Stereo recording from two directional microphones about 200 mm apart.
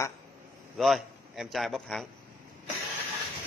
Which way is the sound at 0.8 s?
Centre (ahead or behind).